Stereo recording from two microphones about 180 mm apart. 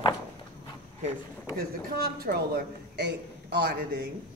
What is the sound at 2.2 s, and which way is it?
A man's voice, 60° right (ahead or behind).